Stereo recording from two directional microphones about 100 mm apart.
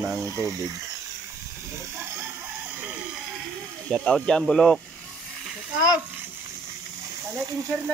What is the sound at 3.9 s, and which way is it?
Speech, 5° left (ahead or behind).